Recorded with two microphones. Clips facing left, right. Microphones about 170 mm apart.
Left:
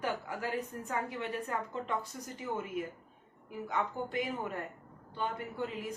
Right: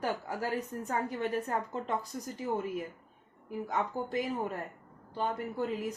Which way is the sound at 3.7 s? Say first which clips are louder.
Right 1 dB; 40° right (ahead or behind).